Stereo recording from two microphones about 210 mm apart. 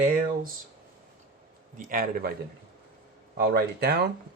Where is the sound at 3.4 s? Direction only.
50° right (ahead or behind).